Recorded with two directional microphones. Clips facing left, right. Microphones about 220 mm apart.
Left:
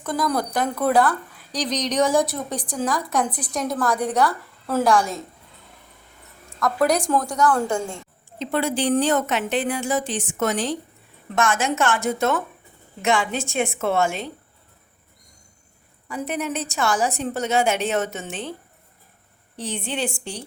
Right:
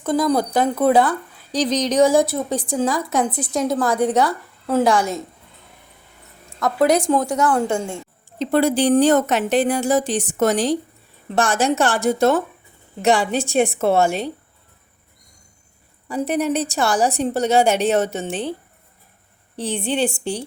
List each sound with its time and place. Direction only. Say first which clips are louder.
0.0 s a woman's voice: right 5 dB; 25° right (ahead or behind)
6.6 s a woman's voice: right 3 dB; 25° right (ahead or behind)
8.4 s a woman's voice: right 6 dB; 40° right (ahead or behind)
16.0 s a woman's voice: right 6 dB; 35° right (ahead or behind)
19.5 s a woman's voice: right 5 dB; 30° right (ahead or behind)